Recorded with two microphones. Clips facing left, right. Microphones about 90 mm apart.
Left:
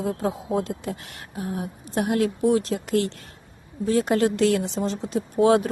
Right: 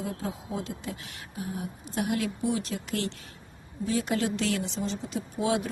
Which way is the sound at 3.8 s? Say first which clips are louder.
Left 7 dB; 50° left (ahead or behind).